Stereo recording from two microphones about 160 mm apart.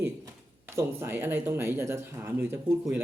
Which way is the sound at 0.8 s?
15° right (ahead or behind).